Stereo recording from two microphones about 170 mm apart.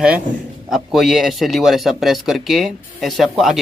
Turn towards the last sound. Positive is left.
turn(degrees=0)  # may be behind; listen again after turning